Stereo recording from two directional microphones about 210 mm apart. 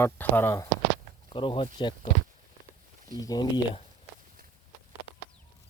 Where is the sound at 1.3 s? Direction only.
25° left (ahead or behind).